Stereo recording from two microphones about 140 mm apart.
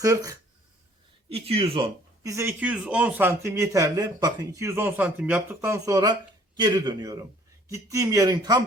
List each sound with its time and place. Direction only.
0.0 s speech: 25° right (ahead or behind)
1.3 s speech: 45° right (ahead or behind)
2.2 s speech: 20° right (ahead or behind)